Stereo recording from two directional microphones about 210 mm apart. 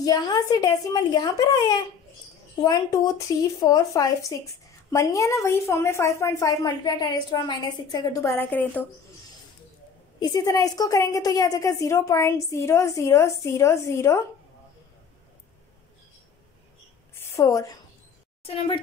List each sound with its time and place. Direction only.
0.0 s a woman's voice: 20° left (ahead or behind)
3.5 s a woman's voice: 15° left (ahead or behind)
10.2 s a woman's voice: 15° left (ahead or behind)
17.1 s a sound: 10° left (ahead or behind)
18.4 s a woman's voice: 25° left (ahead or behind)